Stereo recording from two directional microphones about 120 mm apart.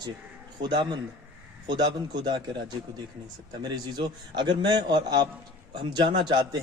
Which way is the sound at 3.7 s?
40° right (ahead or behind).